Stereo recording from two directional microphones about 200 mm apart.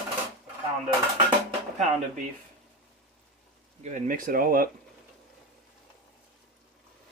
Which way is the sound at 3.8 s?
40° right (ahead or behind).